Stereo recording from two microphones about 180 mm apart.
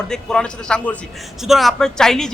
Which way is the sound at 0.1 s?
5° left (ahead or behind).